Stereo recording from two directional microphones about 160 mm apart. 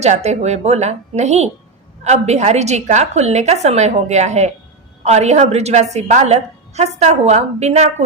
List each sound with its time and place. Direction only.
0.0 s a woman's voice: 45° right (ahead or behind)